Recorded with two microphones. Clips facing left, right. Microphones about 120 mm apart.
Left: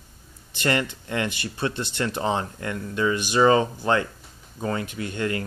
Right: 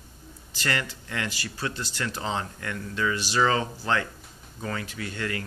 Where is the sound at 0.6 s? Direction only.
20° left (ahead or behind).